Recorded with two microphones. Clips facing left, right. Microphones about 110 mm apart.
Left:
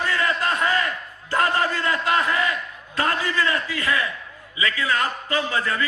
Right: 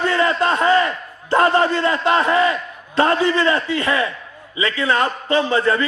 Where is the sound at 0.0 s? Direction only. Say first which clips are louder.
Right 6 dB; 25° right (ahead or behind).